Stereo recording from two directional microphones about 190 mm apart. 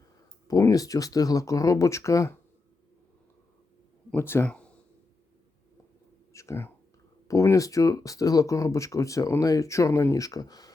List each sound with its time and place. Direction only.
0.4 s speech: 20° left (ahead or behind)
4.1 s speech: 10° left (ahead or behind)
6.3 s speech: 15° left (ahead or behind)